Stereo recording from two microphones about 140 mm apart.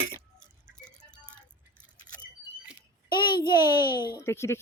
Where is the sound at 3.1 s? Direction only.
35° left (ahead or behind).